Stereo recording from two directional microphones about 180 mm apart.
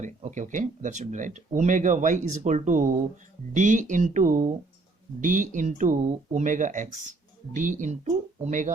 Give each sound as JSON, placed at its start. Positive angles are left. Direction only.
{"t": 0.0, "sound": "speech", "side_deg": -45}